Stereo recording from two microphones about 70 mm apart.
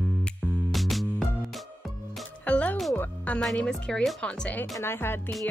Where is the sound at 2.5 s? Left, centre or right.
Centre.